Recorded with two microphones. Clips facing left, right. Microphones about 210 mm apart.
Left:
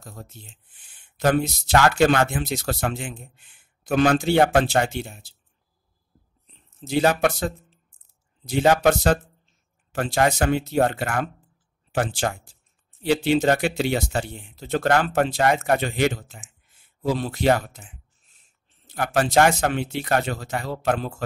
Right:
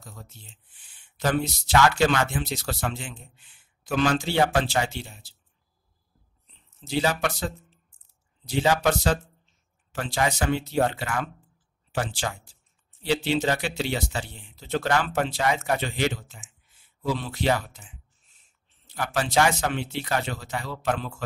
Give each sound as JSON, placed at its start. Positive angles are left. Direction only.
{"t": 0.0, "sound": "speech", "side_deg": 50}
{"t": 6.9, "sound": "speech", "side_deg": 50}